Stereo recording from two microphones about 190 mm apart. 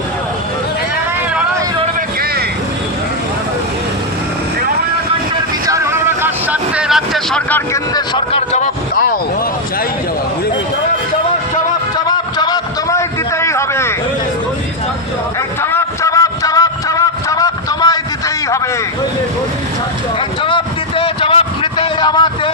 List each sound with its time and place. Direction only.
5.6 s vehicle: 15° right (ahead or behind); by 7.6 s 5° left (ahead or behind)
7.7 s speech: 20° left (ahead or behind); by 9.1 s 45° left (ahead or behind)
12.0 s a sound: 20° left (ahead or behind)
15.6 s music: 15° left (ahead or behind)
18.4 s vehicle: 15° left (ahead or behind)
20.4 s vehicle: 25° left (ahead or behind)